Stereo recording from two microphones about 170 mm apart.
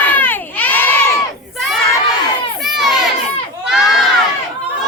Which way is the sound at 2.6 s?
Centre (ahead or behind).